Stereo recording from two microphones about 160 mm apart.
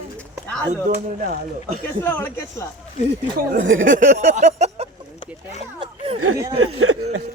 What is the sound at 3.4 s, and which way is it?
Speech, 55° right (ahead or behind).